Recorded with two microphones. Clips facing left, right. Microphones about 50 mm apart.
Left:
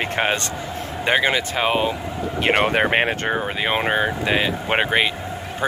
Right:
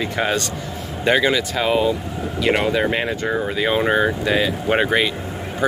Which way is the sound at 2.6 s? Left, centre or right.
Left.